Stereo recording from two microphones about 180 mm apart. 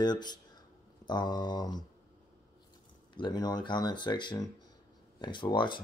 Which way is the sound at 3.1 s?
25° left (ahead or behind).